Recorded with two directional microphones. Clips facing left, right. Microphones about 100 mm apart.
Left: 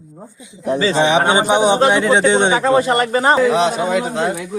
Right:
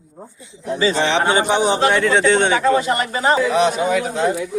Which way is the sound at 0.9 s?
15° left (ahead or behind).